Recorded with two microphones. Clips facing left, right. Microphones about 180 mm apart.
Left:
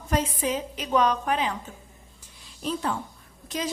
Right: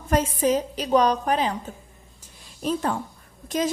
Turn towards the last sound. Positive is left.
turn(degrees=-45)  # may be behind; listen again after turning